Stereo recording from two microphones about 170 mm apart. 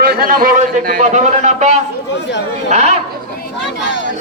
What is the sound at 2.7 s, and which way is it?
Speech, 40° right (ahead or behind).